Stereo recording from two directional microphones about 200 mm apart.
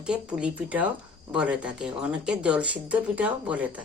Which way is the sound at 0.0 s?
5° right (ahead or behind).